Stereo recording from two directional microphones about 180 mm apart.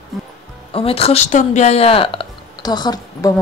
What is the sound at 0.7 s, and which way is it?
Speech, 30° left (ahead or behind).